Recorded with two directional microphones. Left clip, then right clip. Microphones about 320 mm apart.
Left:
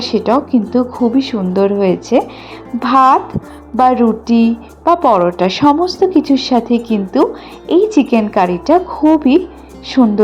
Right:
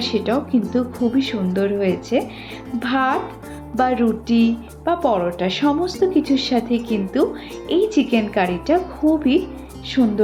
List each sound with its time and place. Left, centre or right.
0.0 s speech: centre
10.0 s speech: centre